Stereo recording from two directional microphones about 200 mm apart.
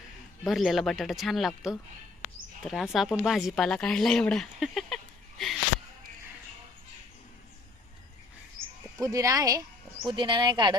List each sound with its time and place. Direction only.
0.4 s speech: centre (ahead or behind)
9.0 s speech: 15° right (ahead or behind)